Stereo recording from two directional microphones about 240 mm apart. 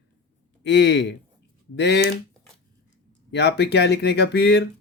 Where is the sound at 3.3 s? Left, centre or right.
Left.